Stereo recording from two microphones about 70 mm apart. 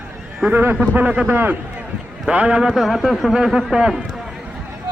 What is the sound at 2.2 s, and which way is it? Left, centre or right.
A man's voice, centre.